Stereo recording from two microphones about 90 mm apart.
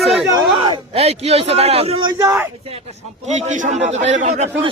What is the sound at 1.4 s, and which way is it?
Speech, 90° right.